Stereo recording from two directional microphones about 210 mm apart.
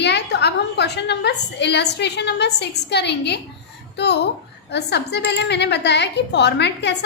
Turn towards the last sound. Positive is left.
turn(degrees=55)  # may be behind; listen again after turning